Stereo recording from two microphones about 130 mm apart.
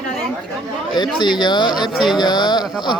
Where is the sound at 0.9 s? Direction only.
35° left (ahead or behind).